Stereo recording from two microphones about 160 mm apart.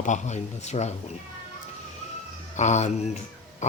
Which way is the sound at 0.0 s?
50° left (ahead or behind).